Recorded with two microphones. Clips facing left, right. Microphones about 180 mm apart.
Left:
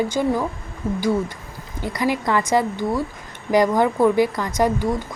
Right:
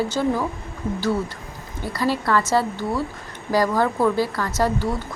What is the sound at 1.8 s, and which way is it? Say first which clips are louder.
A woman's voice: left 1 dB; 15° left (ahead or behind).